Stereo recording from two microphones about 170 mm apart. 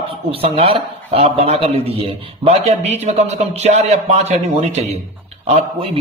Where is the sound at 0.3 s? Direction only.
35° right (ahead or behind).